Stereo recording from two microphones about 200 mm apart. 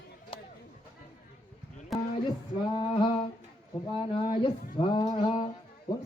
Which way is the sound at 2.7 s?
25° left (ahead or behind).